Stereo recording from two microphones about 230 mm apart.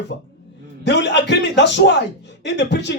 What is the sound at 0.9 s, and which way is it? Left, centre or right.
Speech, left.